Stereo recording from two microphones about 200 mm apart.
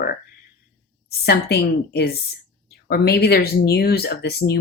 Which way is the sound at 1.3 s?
55° left (ahead or behind).